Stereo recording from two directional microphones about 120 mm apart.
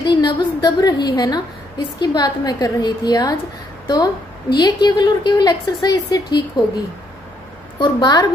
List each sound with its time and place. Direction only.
0.0 s a woman's voice: 35° left (ahead or behind)
7.8 s a woman's voice: 35° left (ahead or behind)